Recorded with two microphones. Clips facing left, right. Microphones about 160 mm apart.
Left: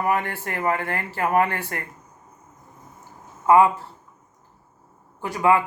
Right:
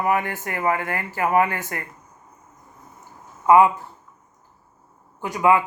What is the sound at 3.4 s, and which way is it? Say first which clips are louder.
Speech: right 1 dB; 15° right (ahead or behind).